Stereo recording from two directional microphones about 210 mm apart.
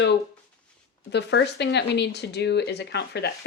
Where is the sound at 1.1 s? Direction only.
55° left (ahead or behind).